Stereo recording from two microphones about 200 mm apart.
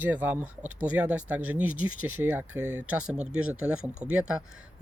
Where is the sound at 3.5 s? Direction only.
5° right (ahead or behind).